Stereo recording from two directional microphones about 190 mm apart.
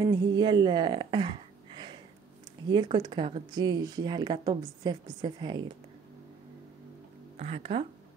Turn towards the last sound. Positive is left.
turn(degrees=-35)  # may be behind; listen again after turning